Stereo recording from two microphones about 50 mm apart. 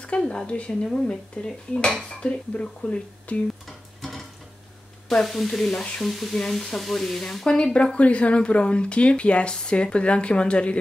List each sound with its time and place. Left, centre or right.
0.2 s speech: centre
3.6 s stir: centre
5.1 s speech: centre; by 10.8 s left